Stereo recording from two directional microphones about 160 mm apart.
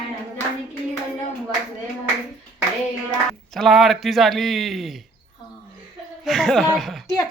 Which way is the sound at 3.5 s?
Centre (ahead or behind).